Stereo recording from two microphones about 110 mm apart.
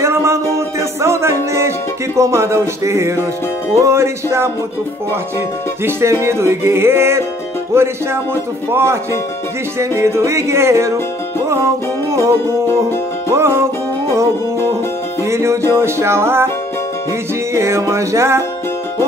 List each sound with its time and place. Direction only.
0.0 s music: 25° right (ahead or behind)
5.9 s music: 20° right (ahead or behind)
13.3 s music: 20° right (ahead or behind)
15.2 s music: 25° right (ahead or behind)
17.6 s music: 25° right (ahead or behind)